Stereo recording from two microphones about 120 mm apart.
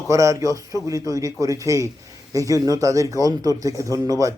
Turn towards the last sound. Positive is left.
turn(degrees=-30)  # may be behind; listen again after turning